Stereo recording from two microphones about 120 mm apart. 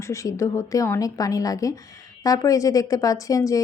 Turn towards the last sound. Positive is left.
turn(degrees=30)  # may be behind; listen again after turning